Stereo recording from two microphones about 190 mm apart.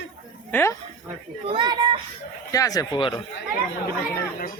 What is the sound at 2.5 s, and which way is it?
Speech, 20° left (ahead or behind).